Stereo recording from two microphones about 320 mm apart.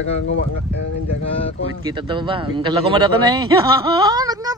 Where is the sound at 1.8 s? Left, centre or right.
Centre.